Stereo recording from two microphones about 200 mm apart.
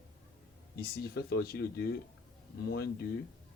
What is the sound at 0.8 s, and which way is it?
Speech, 50° left (ahead or behind).